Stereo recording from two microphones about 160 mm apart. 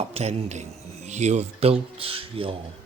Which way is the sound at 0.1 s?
40° right (ahead or behind).